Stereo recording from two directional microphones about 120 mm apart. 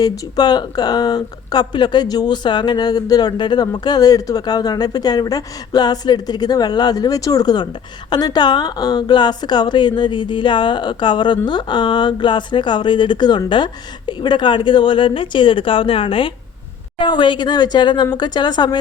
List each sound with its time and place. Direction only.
0.0 s speech: 35° left (ahead or behind)